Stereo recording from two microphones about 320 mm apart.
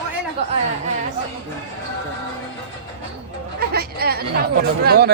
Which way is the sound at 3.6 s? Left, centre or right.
Right.